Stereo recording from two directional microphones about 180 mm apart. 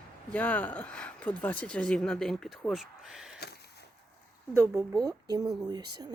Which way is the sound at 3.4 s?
65° left (ahead or behind).